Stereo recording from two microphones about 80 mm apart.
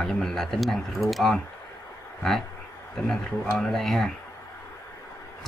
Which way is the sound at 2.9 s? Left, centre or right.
Centre.